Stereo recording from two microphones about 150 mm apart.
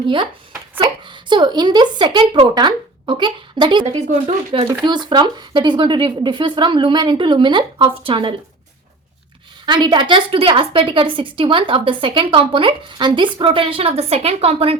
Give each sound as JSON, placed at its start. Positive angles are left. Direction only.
{"t": 0.8, "sound": "a woman's voice", "side_deg": -30}
{"t": 3.8, "sound": "speech", "side_deg": -45}
{"t": 4.9, "sound": "a woman's voice", "side_deg": -30}
{"t": 9.6, "sound": "a woman's voice", "side_deg": -30}